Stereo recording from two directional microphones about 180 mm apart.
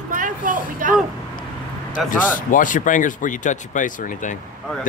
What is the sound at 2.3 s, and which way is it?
Speech, 45° left (ahead or behind).